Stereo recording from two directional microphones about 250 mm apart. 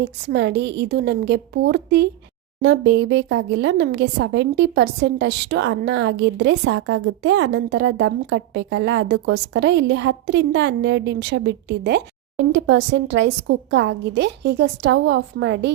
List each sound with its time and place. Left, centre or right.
0.0 s a woman's voice: right